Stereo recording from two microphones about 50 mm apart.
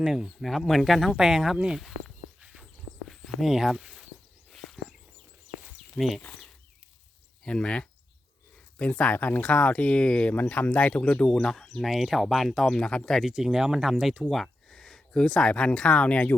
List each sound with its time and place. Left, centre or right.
0.0 s speech: centre
0.3 s speech: centre
1.1 s speech: centre
2.4 s walk: centre
3.1 s a sound: centre
4.5 s a sound: centre
6.0 s speech: centre
7.4 s speech: left
9.1 s speech: left; by 10.3 s centre
10.3 s speech: left
11.3 s speech: centre
11.8 s speech: centre
13.2 s speech: centre
14.3 s speech: centre; by 16.3 s left